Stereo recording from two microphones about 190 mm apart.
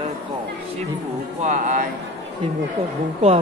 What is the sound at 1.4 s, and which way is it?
Speech, 40° right (ahead or behind).